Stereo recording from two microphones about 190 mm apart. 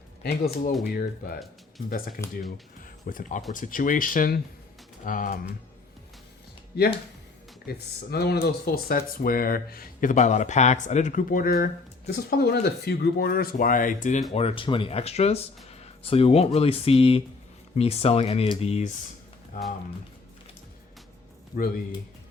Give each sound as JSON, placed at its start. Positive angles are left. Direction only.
{"t": 0.2, "sound": "speech", "side_deg": 55}
{"t": 2.8, "sound": "music", "side_deg": 45}
{"t": 3.5, "sound": "speech", "side_deg": 45}
{"t": 6.7, "sound": "speech", "side_deg": 55}
{"t": 14.3, "sound": "speech", "side_deg": 30}